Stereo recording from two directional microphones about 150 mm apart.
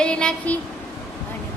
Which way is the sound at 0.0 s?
5° left (ahead or behind).